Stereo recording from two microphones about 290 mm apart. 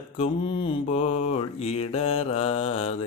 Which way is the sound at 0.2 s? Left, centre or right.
Centre.